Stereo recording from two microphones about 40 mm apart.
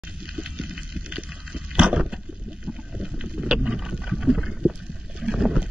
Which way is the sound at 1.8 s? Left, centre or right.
Right.